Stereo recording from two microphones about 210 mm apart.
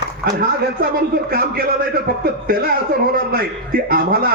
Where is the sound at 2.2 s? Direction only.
45° right (ahead or behind).